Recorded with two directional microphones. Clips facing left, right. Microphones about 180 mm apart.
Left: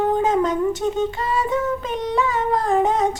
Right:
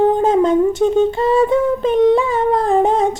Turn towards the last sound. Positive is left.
turn(degrees=-30)  # may be behind; listen again after turning